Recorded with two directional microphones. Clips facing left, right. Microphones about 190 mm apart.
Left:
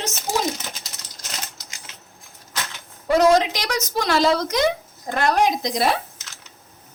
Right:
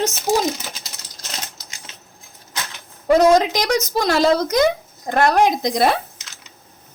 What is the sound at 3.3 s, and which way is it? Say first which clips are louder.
A woman's voice: right 3 dB; 45° right (ahead or behind).